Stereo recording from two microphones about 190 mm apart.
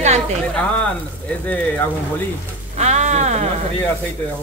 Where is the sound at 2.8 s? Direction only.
35° right (ahead or behind).